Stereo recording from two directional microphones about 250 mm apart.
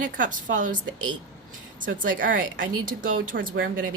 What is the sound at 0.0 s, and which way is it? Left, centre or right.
Speech, right.